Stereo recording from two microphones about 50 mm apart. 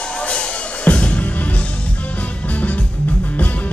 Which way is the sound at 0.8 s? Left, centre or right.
Left.